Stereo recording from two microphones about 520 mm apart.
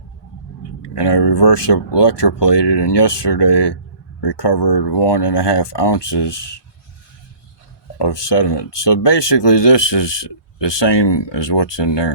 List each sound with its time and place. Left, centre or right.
0.8 s speech: left
7.9 s speech: left